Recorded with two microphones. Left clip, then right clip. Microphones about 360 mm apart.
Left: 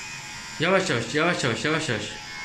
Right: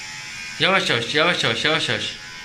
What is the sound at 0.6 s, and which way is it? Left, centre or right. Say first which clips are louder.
Speech: right 4 dB; centre.